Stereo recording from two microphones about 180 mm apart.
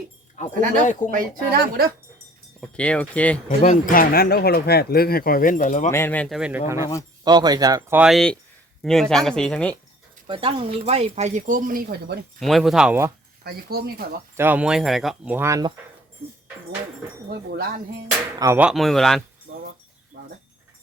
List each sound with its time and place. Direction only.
0.4 s speech: 45° left (ahead or behind)
1.1 s speech: 60° right (ahead or behind)
2.6 s speech: 5° left (ahead or behind)
3.6 s speech: 45° left (ahead or behind)
5.9 s speech: 10° left (ahead or behind)
7.3 s speech: 25° right (ahead or behind); by 9.7 s 5° left (ahead or behind)
10.2 s speech: 30° right (ahead or behind); by 12.2 s 60° right (ahead or behind)
12.4 s speech: centre (ahead or behind)
13.4 s speech: 60° right (ahead or behind)
14.3 s speech: 10° right (ahead or behind)
17.2 s speech: 55° right (ahead or behind)
18.3 s speech: 20° right (ahead or behind)
18.6 s speech: centre (ahead or behind)
19.5 s a sound: 75° right (ahead or behind)